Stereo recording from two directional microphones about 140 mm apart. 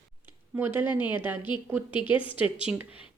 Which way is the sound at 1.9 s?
35° left (ahead or behind).